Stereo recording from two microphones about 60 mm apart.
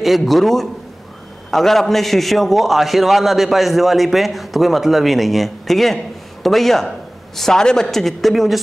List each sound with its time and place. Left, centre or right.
0.0 s a man's voice: centre